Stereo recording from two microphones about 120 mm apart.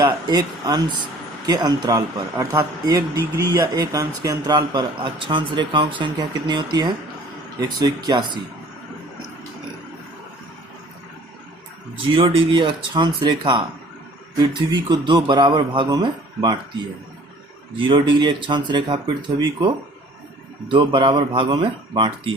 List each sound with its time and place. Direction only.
0.1 s speech: 35° right (ahead or behind)
12.1 s speech: 50° right (ahead or behind)
13.4 s speech: 50° right (ahead or behind)
14.8 s speech: 35° right (ahead or behind)
17.7 s speech: 45° right (ahead or behind)